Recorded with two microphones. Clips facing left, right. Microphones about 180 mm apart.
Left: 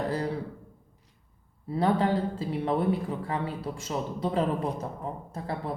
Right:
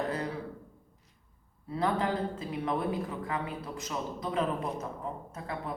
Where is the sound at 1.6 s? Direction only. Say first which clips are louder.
Left 5 dB; 30° left (ahead or behind).